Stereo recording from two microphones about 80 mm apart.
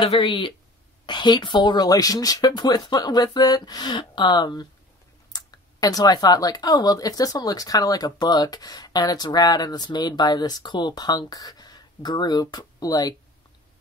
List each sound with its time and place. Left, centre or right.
0.0 s speech: left
1.0 s speech: left
5.3 s speech: left